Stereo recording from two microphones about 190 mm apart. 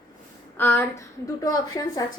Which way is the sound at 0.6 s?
10° left (ahead or behind).